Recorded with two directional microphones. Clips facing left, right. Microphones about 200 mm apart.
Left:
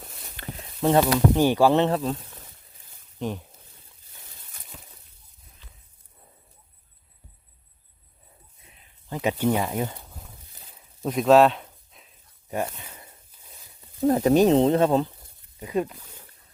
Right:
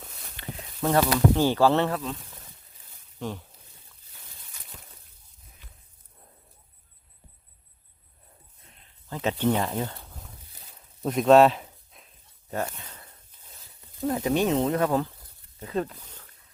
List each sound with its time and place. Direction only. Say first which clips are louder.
0.8 s speech: left 3 dB; 20° left (ahead or behind)
3.2 s speech: left 4 dB; 20° left (ahead or behind)
9.0 s speech: left 1 dB; 15° left (ahead or behind)
10.8 s a sound: even; centre (ahead or behind)
12.5 s a sound: left 2 dB; 10° left (ahead or behind)
14.1 s speech: left 6 dB; 40° left (ahead or behind); by 16.2 s 10° left (ahead or behind)